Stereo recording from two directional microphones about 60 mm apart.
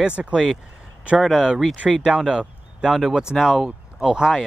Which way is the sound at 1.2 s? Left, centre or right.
Centre.